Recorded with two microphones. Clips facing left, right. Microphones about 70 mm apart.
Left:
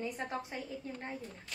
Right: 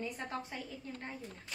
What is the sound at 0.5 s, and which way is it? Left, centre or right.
Speech, centre.